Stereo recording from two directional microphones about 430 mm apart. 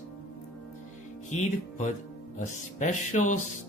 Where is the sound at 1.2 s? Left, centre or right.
Centre.